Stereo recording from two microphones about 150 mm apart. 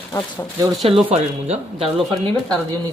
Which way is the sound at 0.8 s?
45° right (ahead or behind).